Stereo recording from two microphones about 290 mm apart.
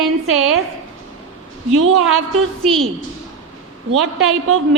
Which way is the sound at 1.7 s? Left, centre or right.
Right.